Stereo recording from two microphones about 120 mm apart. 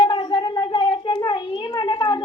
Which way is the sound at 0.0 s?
40° left (ahead or behind).